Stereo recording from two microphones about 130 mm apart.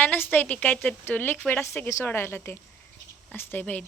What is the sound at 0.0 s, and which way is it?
A woman's voice, 15° left (ahead or behind).